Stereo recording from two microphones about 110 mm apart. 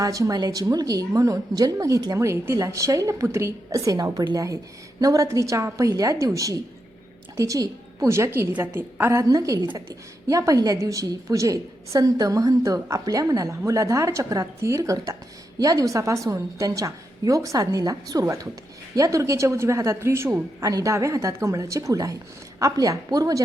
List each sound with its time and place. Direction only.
0.0 s a woman's voice: 35° right (ahead or behind)